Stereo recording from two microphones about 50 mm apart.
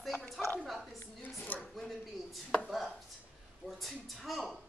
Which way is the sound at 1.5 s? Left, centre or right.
Left.